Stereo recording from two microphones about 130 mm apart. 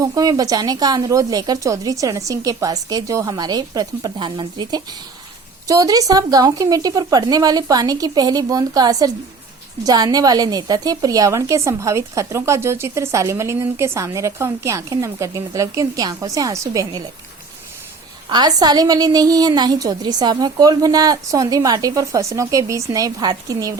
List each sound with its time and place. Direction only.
0.0 s a woman's voice: 30° right (ahead or behind)
18.3 s a woman's voice: 30° right (ahead or behind)